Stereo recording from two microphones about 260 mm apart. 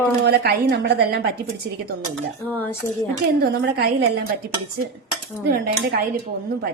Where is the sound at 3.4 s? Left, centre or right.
Right.